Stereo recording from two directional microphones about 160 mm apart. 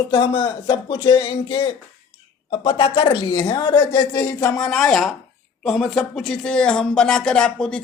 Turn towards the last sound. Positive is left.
turn(degrees=5)  # may be behind; listen again after turning